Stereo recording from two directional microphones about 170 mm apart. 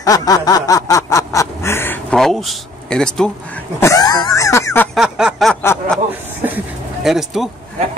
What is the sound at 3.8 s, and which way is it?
Throat clearing, 20° left (ahead or behind).